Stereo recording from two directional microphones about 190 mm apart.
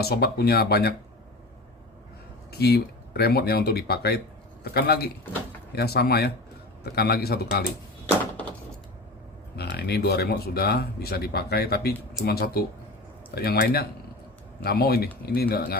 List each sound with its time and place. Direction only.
0.0 s speech: 55° left (ahead or behind)
2.5 s speech: 55° left (ahead or behind)
9.6 s speech: 60° left (ahead or behind)